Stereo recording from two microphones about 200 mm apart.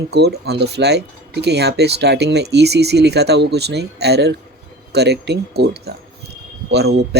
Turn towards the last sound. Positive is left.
turn(degrees=-55)  # may be behind; listen again after turning